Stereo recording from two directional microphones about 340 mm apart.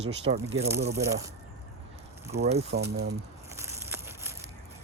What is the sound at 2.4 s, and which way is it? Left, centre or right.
Speech, centre.